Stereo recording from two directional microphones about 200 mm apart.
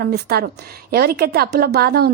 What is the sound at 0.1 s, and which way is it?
A woman's voice, 55° right (ahead or behind).